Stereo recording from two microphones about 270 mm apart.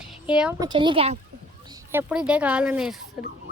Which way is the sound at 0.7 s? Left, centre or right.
Centre.